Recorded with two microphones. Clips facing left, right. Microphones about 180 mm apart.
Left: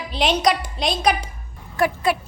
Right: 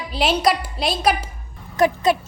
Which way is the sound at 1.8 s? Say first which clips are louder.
Right 3 dB; 20° right (ahead or behind).